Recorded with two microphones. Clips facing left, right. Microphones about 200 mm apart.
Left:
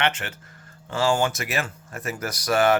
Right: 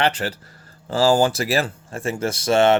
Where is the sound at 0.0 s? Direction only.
35° right (ahead or behind).